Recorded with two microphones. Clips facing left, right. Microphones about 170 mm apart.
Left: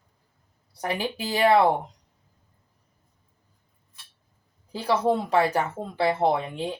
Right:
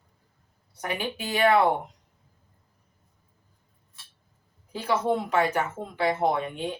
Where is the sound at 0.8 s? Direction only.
35° left (ahead or behind).